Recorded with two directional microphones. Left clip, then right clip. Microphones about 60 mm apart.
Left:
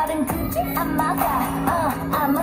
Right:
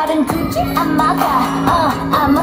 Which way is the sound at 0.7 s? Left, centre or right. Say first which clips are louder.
Right 9 dB; left.